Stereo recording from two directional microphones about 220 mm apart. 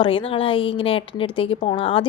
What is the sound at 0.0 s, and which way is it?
A woman's voice, 25° left (ahead or behind).